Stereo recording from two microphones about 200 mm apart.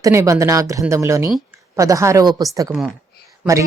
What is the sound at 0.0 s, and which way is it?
Speech, 15° right (ahead or behind).